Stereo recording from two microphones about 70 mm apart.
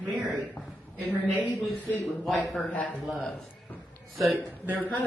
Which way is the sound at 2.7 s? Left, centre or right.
Centre.